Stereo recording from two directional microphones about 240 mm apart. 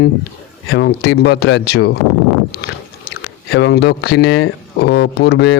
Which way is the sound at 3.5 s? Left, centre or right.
Left.